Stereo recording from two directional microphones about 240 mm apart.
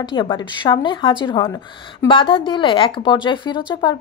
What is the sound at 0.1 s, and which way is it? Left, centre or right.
A woman's voice, centre.